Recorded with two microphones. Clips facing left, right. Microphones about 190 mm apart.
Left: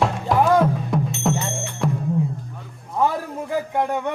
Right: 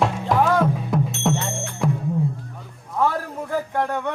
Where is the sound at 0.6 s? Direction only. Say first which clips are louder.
Even; centre (ahead or behind).